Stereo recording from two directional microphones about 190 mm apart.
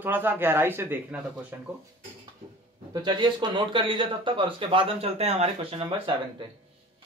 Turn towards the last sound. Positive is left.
turn(degrees=-30)  # may be behind; listen again after turning